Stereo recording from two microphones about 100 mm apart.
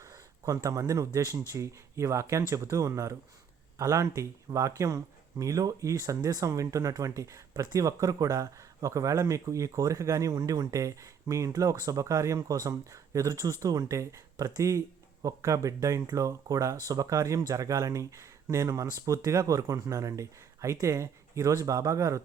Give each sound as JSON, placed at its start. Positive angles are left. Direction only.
{"t": 0.0, "sound": "speech", "side_deg": -35}